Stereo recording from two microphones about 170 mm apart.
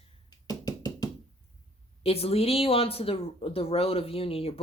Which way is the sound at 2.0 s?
35° left (ahead or behind).